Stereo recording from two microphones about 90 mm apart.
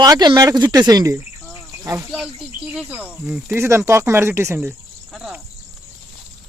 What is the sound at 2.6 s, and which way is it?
Speech, 15° right (ahead or behind).